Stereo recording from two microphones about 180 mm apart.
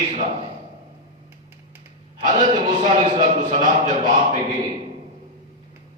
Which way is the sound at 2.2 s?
45° right (ahead or behind).